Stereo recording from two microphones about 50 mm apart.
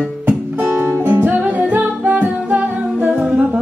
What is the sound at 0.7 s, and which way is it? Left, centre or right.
Music, right.